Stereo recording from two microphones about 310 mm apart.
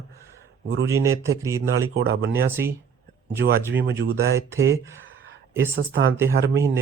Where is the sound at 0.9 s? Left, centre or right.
Centre.